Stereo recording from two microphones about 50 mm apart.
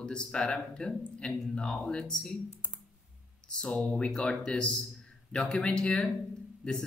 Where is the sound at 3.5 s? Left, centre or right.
Left.